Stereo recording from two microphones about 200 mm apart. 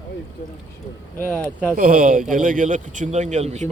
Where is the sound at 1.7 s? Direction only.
45° right (ahead or behind).